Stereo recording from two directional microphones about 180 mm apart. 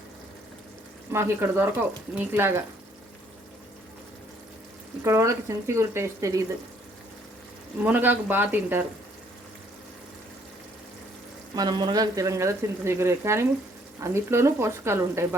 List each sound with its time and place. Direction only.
1.1 s speech: 15° right (ahead or behind)
5.0 s speech: 15° right (ahead or behind)
7.8 s speech: 10° right (ahead or behind)
11.5 s speech: 20° right (ahead or behind)